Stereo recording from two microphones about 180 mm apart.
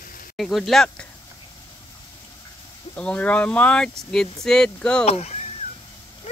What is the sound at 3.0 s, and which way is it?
Speech, 5° left (ahead or behind).